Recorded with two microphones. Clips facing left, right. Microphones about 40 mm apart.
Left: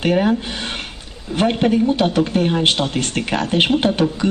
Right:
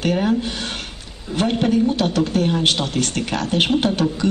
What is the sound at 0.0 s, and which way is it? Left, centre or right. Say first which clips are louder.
A man's voice: left 2 dB; centre.